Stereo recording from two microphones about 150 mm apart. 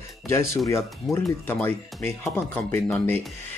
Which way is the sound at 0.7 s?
15° left (ahead or behind).